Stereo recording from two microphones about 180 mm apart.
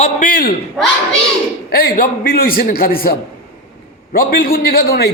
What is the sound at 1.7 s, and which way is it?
A man's voice, 60° left (ahead or behind).